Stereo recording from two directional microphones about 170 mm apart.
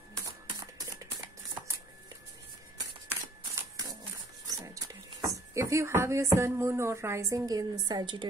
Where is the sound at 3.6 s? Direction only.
20° right (ahead or behind).